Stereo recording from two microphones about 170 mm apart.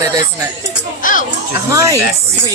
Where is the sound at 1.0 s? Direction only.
50° left (ahead or behind).